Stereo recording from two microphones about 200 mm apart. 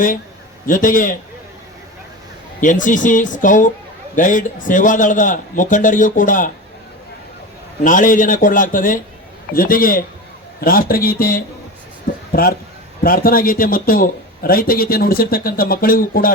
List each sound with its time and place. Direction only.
0.7 s a man's voice: 40° left (ahead or behind)
2.6 s a man's voice: 40° left (ahead or behind)
7.9 s a man's voice: 40° left (ahead or behind)